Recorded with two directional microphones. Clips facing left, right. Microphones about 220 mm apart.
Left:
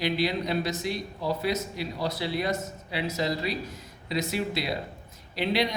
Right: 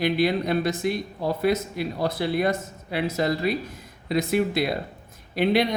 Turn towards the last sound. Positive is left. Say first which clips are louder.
# right 5 dB
turn(degrees=-55)  # may be behind; listen again after turning